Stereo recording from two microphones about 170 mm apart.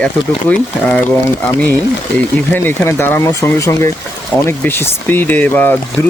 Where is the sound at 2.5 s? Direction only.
10° left (ahead or behind).